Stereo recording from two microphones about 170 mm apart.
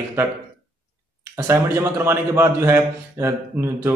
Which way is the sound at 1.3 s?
15° right (ahead or behind).